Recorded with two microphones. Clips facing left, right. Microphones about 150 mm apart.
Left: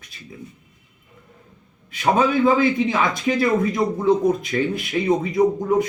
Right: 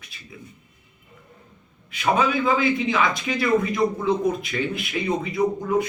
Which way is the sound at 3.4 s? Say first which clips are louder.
Right 1 dB; 25° left (ahead or behind).